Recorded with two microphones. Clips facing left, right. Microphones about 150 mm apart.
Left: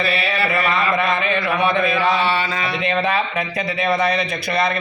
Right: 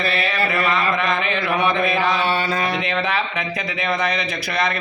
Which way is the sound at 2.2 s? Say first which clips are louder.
Even; 50° right (ahead or behind).